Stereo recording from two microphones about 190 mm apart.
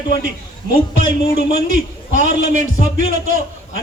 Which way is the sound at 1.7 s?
45° right (ahead or behind).